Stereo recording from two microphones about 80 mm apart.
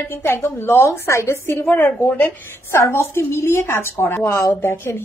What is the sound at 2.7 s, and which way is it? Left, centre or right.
A woman's voice, left.